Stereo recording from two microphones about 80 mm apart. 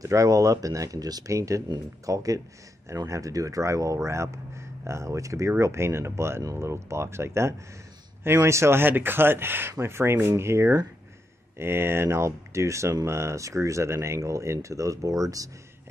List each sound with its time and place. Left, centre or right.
0.0 s speech: right